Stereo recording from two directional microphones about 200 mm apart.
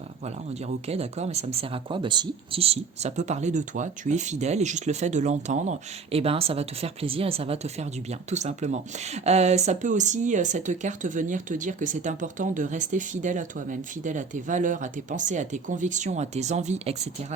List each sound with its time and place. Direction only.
0.6 s speech: 30° right (ahead or behind)